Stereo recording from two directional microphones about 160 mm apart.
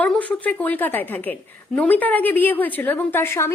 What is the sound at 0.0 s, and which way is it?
A woman's voice, 10° left (ahead or behind).